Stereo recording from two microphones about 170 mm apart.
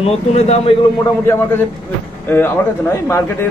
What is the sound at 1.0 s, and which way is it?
A man's voice, 15° left (ahead or behind).